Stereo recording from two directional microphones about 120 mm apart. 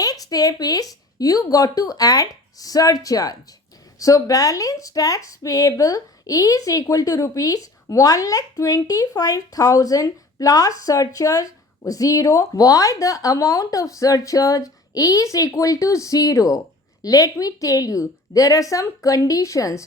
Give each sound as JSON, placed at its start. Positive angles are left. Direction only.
{"t": 0.0, "sound": "speech", "side_deg": 30}